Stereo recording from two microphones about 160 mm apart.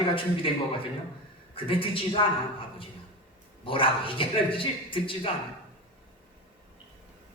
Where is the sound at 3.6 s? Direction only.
35° left (ahead or behind).